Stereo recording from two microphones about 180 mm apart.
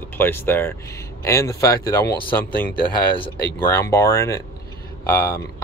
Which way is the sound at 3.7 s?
15° left (ahead or behind).